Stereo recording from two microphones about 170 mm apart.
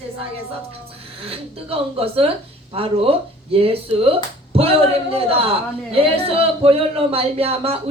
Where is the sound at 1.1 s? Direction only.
35° right (ahead or behind).